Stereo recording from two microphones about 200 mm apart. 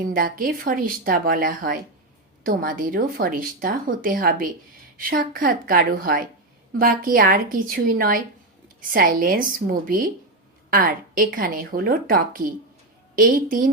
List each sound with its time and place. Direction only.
0.1 s speech: 45° right (ahead or behind)